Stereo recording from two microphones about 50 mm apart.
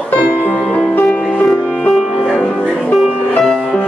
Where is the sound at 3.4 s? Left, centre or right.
Centre.